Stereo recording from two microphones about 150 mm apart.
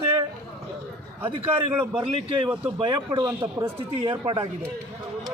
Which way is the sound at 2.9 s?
25° right (ahead or behind).